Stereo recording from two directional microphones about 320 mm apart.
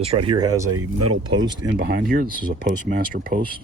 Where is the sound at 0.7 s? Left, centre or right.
Right.